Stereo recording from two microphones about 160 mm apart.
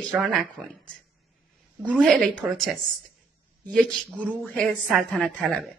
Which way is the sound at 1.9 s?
5° left (ahead or behind).